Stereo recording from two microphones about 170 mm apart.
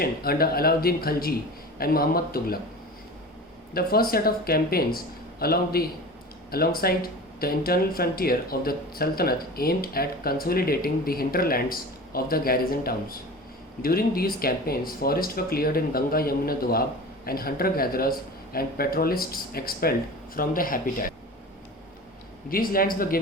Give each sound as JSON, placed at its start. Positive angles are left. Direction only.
{"t": 0.0, "sound": "speech", "side_deg": 65}
{"t": 3.8, "sound": "speech", "side_deg": 60}
{"t": 22.4, "sound": "speech", "side_deg": 55}